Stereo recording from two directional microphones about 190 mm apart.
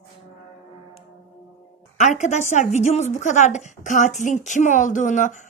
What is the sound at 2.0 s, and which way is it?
A woman's voice, 40° left (ahead or behind).